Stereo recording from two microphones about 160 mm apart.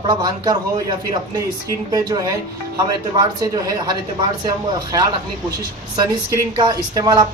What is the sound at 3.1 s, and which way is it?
Speech, 25° right (ahead or behind).